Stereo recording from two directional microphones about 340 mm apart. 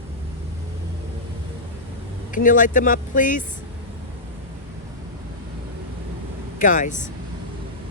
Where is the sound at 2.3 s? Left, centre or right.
Left.